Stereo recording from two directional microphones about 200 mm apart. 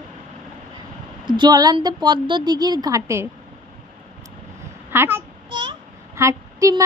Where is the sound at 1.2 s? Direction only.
20° right (ahead or behind).